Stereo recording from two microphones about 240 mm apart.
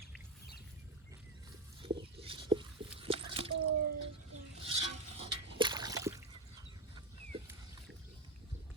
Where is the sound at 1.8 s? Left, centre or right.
Right.